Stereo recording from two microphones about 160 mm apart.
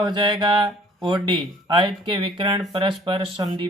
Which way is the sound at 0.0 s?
30° right (ahead or behind).